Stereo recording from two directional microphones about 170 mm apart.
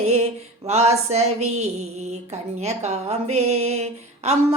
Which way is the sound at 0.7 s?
40° right (ahead or behind).